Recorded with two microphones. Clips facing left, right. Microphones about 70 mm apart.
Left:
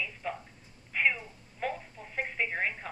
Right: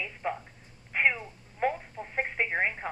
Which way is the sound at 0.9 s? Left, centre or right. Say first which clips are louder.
Right 2 dB; right.